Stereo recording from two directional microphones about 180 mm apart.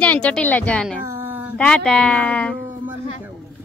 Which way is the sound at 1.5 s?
5° left (ahead or behind).